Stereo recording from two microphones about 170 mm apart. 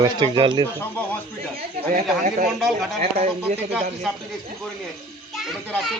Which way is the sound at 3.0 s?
40° right (ahead or behind).